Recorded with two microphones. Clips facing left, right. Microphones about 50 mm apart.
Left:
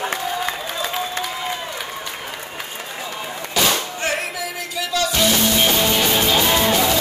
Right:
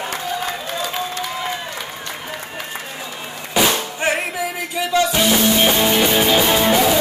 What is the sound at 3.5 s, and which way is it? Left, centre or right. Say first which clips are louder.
Music: right 2 dB; centre.